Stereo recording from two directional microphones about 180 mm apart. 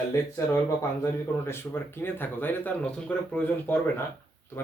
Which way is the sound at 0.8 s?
15° left (ahead or behind).